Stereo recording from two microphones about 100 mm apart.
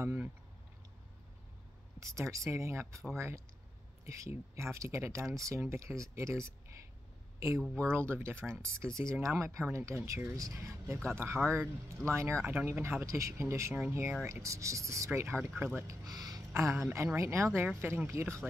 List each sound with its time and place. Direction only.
0.0 s a sound: 25° right (ahead or behind)
2.0 s speech: 30° right (ahead or behind)
15.1 s speech: 20° right (ahead or behind)
15.9 s speech: 35° right (ahead or behind)